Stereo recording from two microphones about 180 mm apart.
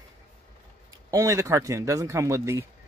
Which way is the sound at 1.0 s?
15° right (ahead or behind).